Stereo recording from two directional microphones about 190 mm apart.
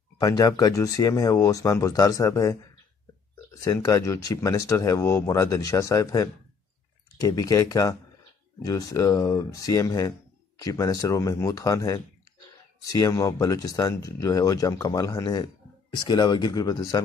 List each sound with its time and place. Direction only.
0.2 s speech: 20° left (ahead or behind)